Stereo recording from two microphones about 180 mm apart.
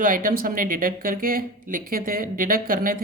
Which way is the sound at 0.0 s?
50° right (ahead or behind).